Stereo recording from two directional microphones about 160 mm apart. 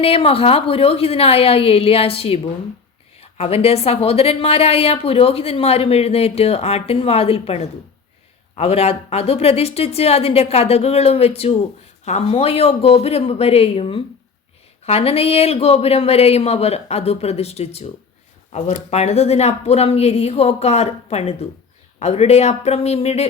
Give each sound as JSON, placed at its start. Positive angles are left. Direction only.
{"t": 0.0, "sound": "a woman's voice", "side_deg": 35}